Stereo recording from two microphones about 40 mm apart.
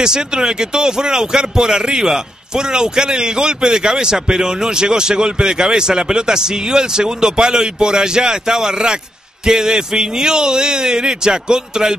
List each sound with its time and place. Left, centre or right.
0.0 s a man's voice: centre